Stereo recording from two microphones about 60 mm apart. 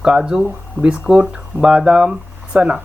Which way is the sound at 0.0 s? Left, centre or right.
Centre.